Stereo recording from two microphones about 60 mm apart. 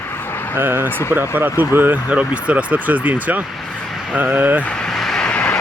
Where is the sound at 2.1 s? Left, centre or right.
Right.